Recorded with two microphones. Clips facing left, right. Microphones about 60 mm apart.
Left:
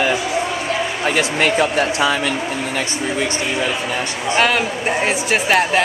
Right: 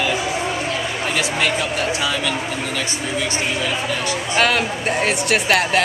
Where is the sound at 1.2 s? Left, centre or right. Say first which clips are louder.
Left 5 dB; left.